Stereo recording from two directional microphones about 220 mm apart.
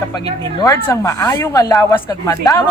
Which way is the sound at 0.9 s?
15° left (ahead or behind).